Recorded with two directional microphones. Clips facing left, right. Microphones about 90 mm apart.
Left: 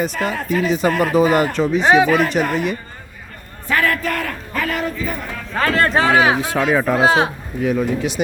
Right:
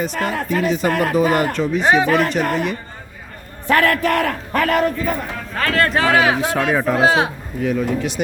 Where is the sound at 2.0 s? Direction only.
45° right (ahead or behind).